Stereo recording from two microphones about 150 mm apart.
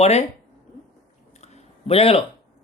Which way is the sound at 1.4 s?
45° left (ahead or behind).